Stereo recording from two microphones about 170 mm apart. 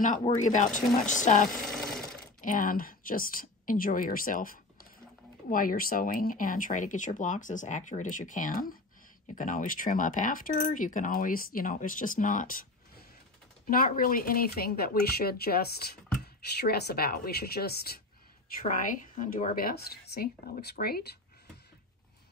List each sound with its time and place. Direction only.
0.4 s speech: 45° left (ahead or behind)
1.7 s a sound: centre (ahead or behind)
2.4 s a woman's voice: 50° left (ahead or behind)
18.6 s a woman's voice: 50° left (ahead or behind)